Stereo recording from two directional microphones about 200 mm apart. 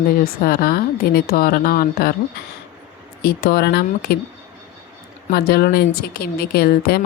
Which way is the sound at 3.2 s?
50° left (ahead or behind).